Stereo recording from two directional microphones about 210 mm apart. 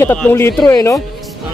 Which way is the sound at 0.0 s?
10° left (ahead or behind).